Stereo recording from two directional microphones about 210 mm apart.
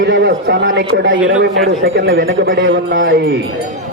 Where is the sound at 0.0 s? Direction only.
55° right (ahead or behind).